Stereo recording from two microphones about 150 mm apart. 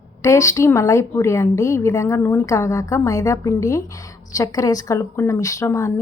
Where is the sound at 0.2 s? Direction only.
20° left (ahead or behind).